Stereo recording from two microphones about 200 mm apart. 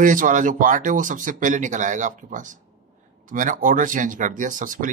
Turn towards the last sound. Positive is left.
turn(degrees=-40)  # may be behind; listen again after turning